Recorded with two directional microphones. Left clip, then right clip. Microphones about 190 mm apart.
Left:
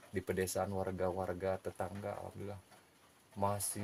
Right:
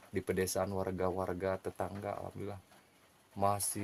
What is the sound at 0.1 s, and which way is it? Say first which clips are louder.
Speech: right 3 dB; 45° right (ahead or behind).